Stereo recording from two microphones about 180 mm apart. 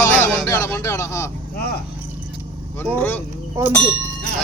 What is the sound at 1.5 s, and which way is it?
Speech, 60° left (ahead or behind).